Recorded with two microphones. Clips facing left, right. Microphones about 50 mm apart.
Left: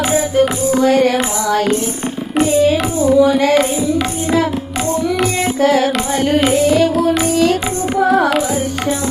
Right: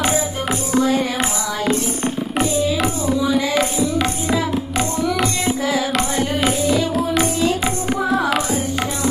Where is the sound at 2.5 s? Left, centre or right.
Left.